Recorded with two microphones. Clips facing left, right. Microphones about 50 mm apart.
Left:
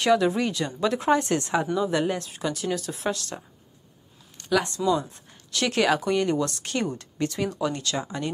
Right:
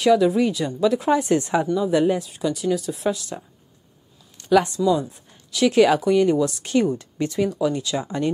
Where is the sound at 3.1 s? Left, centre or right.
Centre.